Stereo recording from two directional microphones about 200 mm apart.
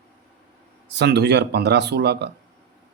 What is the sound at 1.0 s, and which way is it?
Speech, 55° right (ahead or behind).